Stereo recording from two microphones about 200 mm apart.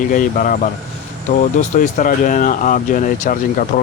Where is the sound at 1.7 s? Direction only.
40° left (ahead or behind).